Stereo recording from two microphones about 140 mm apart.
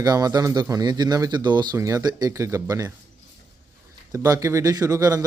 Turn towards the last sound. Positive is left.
turn(degrees=-25)  # may be behind; listen again after turning